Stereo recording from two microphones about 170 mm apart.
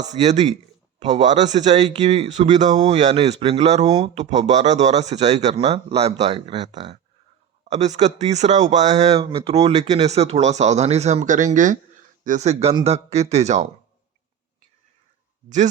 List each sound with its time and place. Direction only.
0.0 s speech: 40° right (ahead or behind)
4.2 s speech: 45° right (ahead or behind)
15.4 s speech: 45° right (ahead or behind)